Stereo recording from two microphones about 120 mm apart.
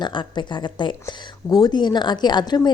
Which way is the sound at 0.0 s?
40° left (ahead or behind).